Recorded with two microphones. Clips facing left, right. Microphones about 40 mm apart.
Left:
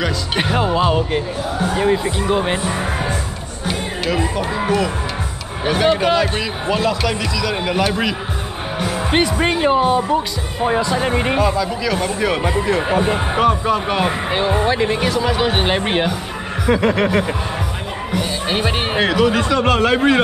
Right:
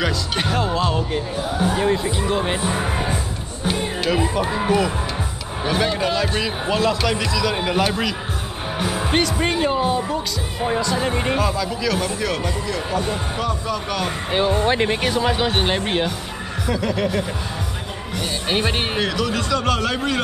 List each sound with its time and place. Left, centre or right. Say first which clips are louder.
0.4 s speech: left 5 dB; centre
1.8 s speech: left 3 dB; centre
3.6 s speech: even; centre
6.4 s speech: left 1 dB; centre
8.7 s music: left 2 dB; centre
9.1 s speech: left 4 dB; centre
12.3 s speech: left 6 dB; left
15.0 s speech: left 2 dB; centre
15.3 s speech: left 3 dB; centre
16.6 s a sound: left 6 dB; left
18.1 s music: left 2 dB; centre
18.9 s speech: left 6 dB; left